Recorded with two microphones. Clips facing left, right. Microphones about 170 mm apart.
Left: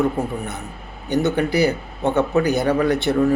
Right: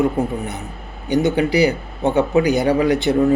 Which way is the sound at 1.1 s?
15° right (ahead or behind).